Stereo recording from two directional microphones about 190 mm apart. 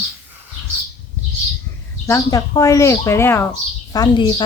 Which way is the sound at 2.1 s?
20° left (ahead or behind).